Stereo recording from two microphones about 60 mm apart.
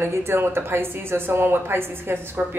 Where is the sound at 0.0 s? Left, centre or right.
Right.